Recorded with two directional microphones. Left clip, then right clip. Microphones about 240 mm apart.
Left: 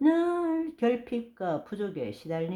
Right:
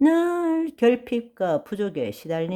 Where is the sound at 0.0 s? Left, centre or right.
Right.